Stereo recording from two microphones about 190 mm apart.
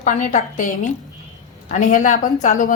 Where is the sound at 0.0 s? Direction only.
40° left (ahead or behind).